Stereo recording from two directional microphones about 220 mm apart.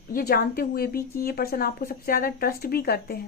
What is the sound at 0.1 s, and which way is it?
Speech, 45° left (ahead or behind).